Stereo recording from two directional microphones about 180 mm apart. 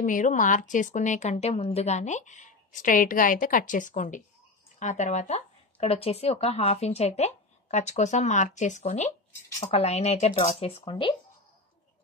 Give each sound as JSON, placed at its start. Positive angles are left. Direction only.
{"t": 0.0, "sound": "a woman's voice", "side_deg": 45}